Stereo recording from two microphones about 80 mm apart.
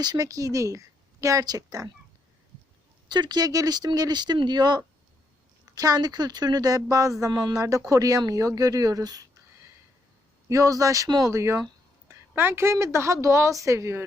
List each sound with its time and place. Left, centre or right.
0.0 s speech: right
3.1 s speech: right
5.7 s speech: right
10.5 s speech: right
11.3 s a sound: right
12.3 s a woman's voice: right